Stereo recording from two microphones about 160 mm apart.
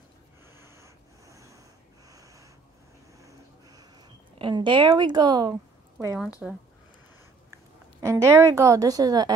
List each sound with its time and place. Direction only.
0.6 s snort: 15° right (ahead or behind)
3.2 s a sound: 20° right (ahead or behind)
6.4 s speech: centre (ahead or behind)
8.0 s a woman's voice: 20° right (ahead or behind)